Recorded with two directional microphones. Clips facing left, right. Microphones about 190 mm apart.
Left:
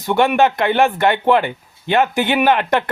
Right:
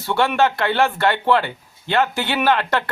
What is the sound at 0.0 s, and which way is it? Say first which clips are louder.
Speech: left 4 dB; 15° left (ahead or behind).